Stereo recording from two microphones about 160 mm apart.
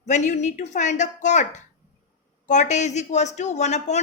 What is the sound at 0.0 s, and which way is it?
Speech, 45° left (ahead or behind).